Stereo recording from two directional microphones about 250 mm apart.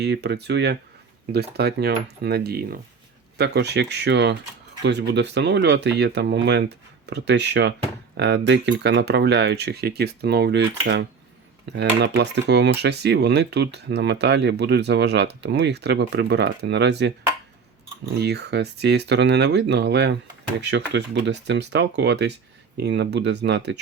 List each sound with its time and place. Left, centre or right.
0.0 s speech: right
18.2 s speech: right